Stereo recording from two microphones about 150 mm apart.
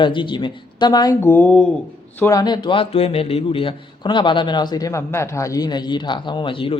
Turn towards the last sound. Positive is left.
turn(degrees=35)  # may be behind; listen again after turning